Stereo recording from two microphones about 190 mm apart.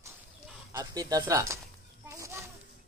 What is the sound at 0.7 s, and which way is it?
Speech, 20° right (ahead or behind).